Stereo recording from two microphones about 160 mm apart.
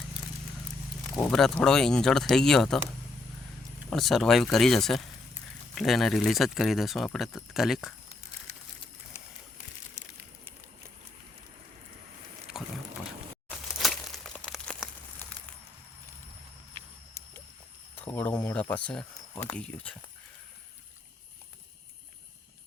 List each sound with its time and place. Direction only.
1.3 s speech: 5° left (ahead or behind)
3.8 s speech: centre (ahead or behind)
13.5 s crumpling: centre (ahead or behind)
18.0 s a sound: 10° left (ahead or behind)
19.4 s speech: 10° left (ahead or behind)